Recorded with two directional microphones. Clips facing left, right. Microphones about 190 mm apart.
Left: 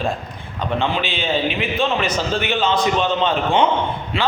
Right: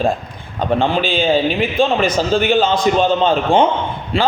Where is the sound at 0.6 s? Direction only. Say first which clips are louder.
Right 5 dB; 35° right (ahead or behind).